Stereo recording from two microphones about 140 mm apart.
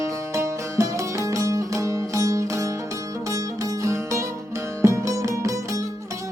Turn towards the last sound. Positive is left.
turn(degrees=-25)  # may be behind; listen again after turning